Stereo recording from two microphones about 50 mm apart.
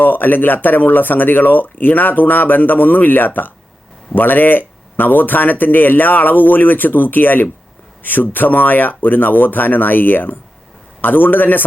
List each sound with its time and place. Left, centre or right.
0.0 s speech: left